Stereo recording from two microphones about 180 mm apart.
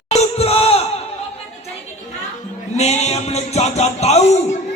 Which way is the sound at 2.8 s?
35° left (ahead or behind).